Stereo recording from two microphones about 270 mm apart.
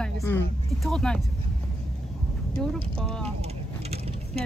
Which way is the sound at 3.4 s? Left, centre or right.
Right.